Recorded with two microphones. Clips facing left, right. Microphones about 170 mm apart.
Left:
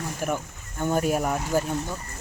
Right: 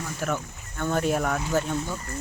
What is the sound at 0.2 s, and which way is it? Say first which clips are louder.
Speech: even; 10° left (ahead or behind).